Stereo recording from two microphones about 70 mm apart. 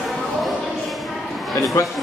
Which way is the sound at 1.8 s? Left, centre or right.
Left.